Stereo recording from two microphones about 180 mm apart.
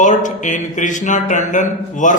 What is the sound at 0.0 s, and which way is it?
Speech, 45° left (ahead or behind).